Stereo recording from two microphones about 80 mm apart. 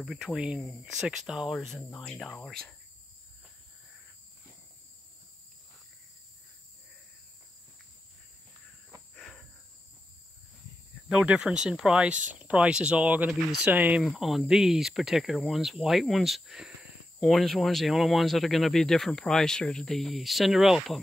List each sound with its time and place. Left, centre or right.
0.0 s speech: centre
9.1 s insect: centre
11.1 s speech: centre
14.0 s speech: centre